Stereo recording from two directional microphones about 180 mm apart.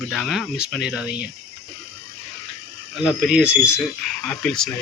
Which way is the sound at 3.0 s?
5° right (ahead or behind).